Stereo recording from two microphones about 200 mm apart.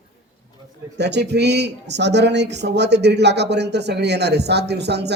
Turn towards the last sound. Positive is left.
turn(degrees=-55)  # may be behind; listen again after turning